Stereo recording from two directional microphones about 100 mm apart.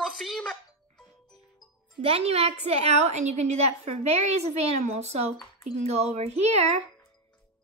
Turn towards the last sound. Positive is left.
turn(degrees=-90)